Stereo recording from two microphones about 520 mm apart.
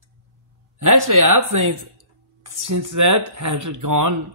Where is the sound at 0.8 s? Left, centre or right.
Right.